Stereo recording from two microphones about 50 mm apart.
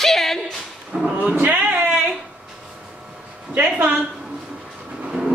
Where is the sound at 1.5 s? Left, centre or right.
Right.